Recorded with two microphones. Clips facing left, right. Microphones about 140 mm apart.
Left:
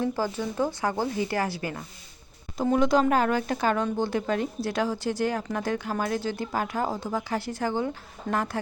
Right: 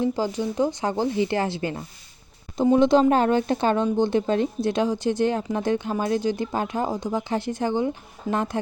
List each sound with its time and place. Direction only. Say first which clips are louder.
0.0 s speech: right 4 dB; 20° right (ahead or behind)
8.3 s speech: right 3 dB; 5° right (ahead or behind)